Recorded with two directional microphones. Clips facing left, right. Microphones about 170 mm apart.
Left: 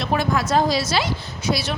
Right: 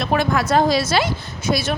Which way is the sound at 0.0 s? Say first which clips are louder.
Right 2 dB; 65° right (ahead or behind).